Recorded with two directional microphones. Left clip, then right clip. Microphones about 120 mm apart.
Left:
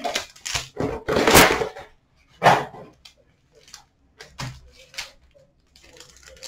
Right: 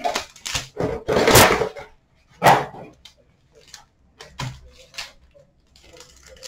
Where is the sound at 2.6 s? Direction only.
5° left (ahead or behind).